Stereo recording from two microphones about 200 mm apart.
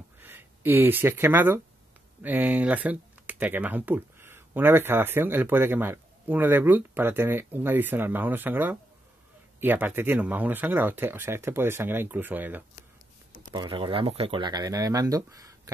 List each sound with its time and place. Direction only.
0.2 s speech: 10° right (ahead or behind)
13.5 s speech: 25° right (ahead or behind)